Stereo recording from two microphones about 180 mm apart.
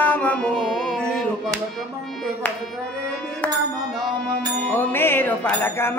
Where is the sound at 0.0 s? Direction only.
10° left (ahead or behind).